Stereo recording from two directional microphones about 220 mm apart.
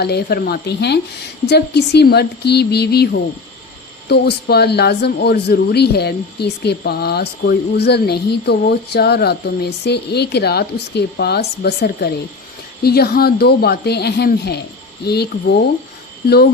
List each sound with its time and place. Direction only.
0.0 s speech: 45° left (ahead or behind)